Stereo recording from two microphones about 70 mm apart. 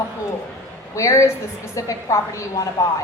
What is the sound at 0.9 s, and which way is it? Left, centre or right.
A woman's voice, left.